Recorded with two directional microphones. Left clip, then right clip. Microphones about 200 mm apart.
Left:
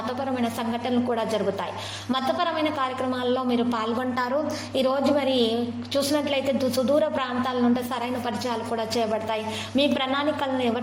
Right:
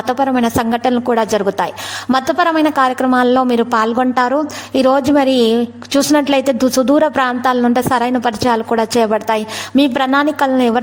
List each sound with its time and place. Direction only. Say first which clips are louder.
0.3 s a woman's voice: right 12 dB; 45° right (ahead or behind)